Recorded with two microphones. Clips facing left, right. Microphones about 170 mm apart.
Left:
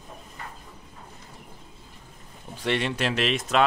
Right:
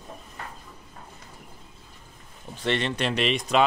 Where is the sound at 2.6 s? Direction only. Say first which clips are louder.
Even; 10° left (ahead or behind).